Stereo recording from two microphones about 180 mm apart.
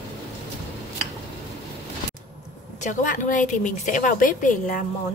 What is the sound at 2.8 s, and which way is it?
A woman's voice, 45° left (ahead or behind).